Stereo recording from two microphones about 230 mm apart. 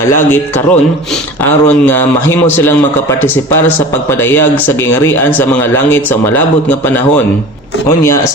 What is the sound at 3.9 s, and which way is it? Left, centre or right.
A man's voice, centre.